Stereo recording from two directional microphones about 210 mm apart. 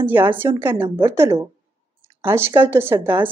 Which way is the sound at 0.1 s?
10° right (ahead or behind).